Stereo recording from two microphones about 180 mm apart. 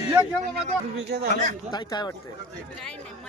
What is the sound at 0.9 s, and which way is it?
Speech, 65° right (ahead or behind).